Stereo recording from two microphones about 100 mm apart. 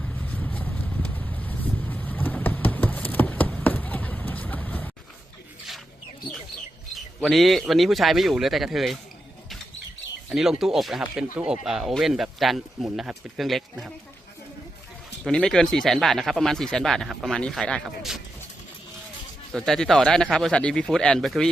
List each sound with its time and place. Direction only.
0.2 s vehicle: 15° left (ahead or behind)
2.6 s clip-clop: 15° left (ahead or behind)
7.2 s speech: centre (ahead or behind)
10.2 s speech: 5° right (ahead or behind)
11.0 s speech: 15° right (ahead or behind)
15.2 s speech: 5° left (ahead or behind)
17.8 s speech: 5° right (ahead or behind)
19.5 s speech: 5° left (ahead or behind)